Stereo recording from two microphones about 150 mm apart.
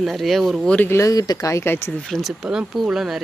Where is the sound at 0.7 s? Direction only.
15° left (ahead or behind).